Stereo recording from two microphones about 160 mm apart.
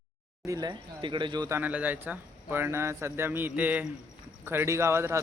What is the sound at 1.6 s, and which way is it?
Speech, 10° right (ahead or behind).